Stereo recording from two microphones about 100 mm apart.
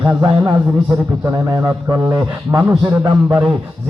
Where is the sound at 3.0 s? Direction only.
45° right (ahead or behind).